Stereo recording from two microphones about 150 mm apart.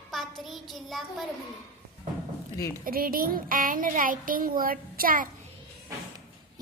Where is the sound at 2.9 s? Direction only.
80° right.